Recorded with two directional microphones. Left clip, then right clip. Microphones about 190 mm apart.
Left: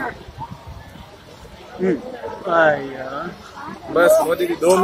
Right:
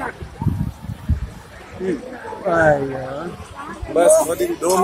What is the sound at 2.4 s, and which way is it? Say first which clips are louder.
Speech: even; 55° right (ahead or behind).